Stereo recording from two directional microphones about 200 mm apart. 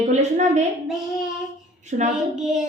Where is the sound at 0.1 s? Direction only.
35° right (ahead or behind).